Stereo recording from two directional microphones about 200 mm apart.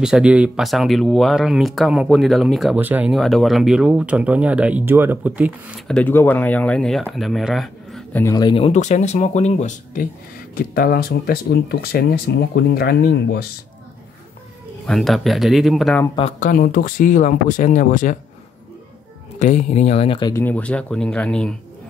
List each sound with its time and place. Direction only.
0.0 s speech: 5° right (ahead or behind)
8.2 s speech: 20° left (ahead or behind); by 13.5 s 55° left (ahead or behind)
14.9 s speech: centre (ahead or behind)
16.2 s speech: 35° left (ahead or behind)
19.4 s speech: 35° left (ahead or behind)
20.4 s speech: 5° left (ahead or behind)